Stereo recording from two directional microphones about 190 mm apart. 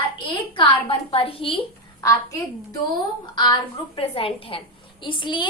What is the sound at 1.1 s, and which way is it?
Speech, 30° left (ahead or behind).